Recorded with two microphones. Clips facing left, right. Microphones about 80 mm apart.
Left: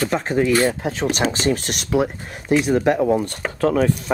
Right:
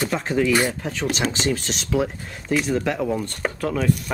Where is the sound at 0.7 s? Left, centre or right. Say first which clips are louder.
Left 5 dB; left.